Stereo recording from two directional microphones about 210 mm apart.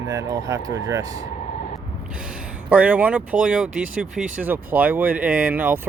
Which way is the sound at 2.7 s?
5° right (ahead or behind).